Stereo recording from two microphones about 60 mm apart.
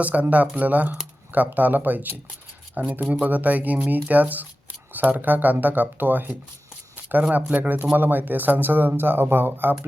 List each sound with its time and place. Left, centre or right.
0.0 s speech: right
6.9 s shuffling cards: right
7.5 s speech: right